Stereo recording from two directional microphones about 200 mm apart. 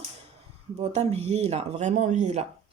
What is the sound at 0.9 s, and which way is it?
Speech, 30° right (ahead or behind).